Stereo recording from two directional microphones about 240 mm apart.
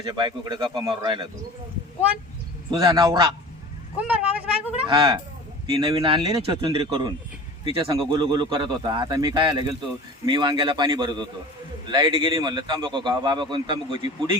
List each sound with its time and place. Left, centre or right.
0.0 s a man's voice: centre
2.6 s a man's voice: centre
4.9 s a man's voice: centre